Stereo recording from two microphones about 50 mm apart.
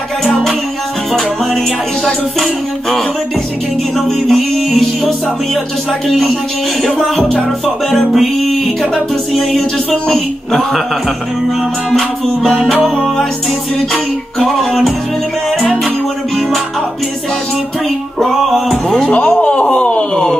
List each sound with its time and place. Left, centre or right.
4.3 s music: centre
11.9 s music: centre
18.4 s music: centre
19.0 s wail: left